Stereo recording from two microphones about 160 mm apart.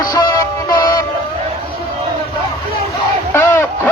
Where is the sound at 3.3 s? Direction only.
15° left (ahead or behind).